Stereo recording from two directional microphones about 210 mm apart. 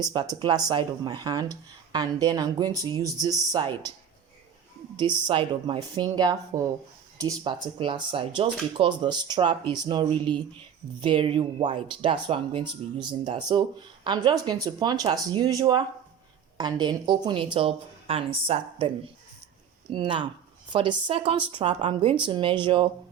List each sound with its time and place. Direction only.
0.0 s speech: 20° right (ahead or behind)
4.9 s speech: 20° right (ahead or behind)
19.9 s speech: 25° right (ahead or behind)